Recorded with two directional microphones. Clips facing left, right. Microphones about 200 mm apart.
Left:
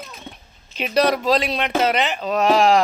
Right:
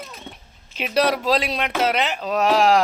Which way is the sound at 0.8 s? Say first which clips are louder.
Left 2 dB; 5° right (ahead or behind).